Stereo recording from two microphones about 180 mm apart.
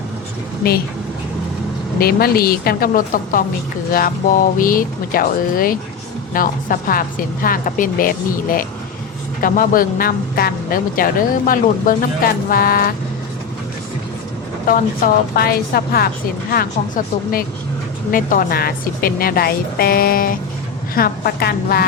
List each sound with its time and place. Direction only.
2.0 s speech: 55° left (ahead or behind)
4.5 s speech: 50° left (ahead or behind)
14.7 s speech: 55° left (ahead or behind)